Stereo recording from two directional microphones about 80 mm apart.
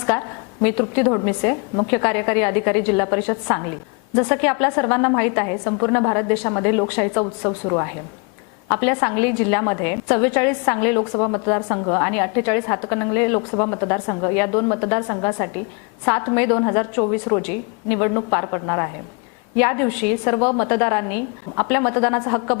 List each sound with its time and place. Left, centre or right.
0.0 s a woman's voice: left